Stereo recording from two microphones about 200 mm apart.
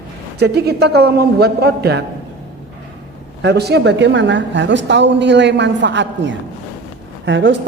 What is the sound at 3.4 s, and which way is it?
A woman's voice, 55° right (ahead or behind).